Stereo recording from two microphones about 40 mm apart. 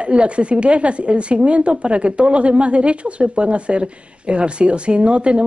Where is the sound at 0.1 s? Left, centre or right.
Right.